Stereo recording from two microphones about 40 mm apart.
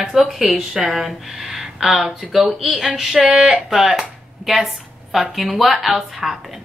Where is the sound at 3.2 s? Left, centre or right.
Right.